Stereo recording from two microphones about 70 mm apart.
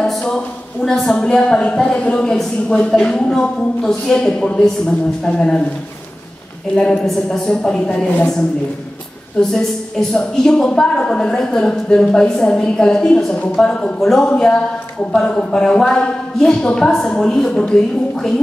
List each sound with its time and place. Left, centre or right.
0.2 s a woman's voice: centre
6.8 s a woman's voice: centre
9.4 s a woman's voice: centre